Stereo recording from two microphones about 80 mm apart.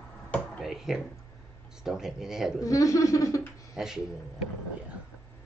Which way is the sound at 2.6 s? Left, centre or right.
Left.